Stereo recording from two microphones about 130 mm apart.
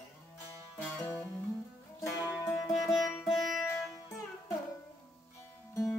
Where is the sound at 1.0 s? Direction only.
20° left (ahead or behind).